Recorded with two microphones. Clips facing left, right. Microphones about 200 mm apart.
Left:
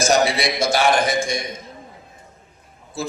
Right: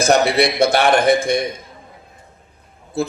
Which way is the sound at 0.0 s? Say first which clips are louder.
Right 4 dB; 60° right (ahead or behind).